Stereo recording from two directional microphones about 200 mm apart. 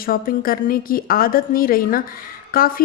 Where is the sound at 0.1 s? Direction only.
45° left (ahead or behind).